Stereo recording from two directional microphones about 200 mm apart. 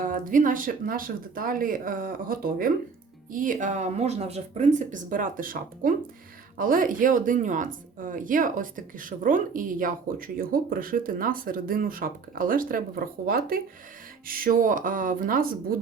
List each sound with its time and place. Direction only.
0.0 s a woman's voice: 40° right (ahead or behind)